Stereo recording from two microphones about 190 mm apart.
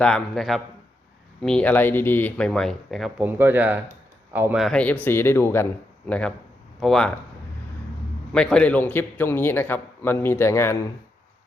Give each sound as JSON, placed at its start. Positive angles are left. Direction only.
{"t": 0.0, "sound": "speech", "side_deg": 0}
{"t": 4.6, "sound": "a man's voice", "side_deg": 5}
{"t": 8.3, "sound": "a man's voice", "side_deg": 5}